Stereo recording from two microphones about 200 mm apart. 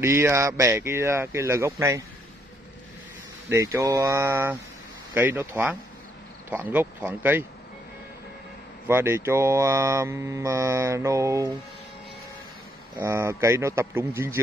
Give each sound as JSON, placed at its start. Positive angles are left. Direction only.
{"t": 0.0, "sound": "speech", "side_deg": -15}
{"t": 3.4, "sound": "speech", "side_deg": -15}
{"t": 8.8, "sound": "speech", "side_deg": -10}
{"t": 12.9, "sound": "speech", "side_deg": -15}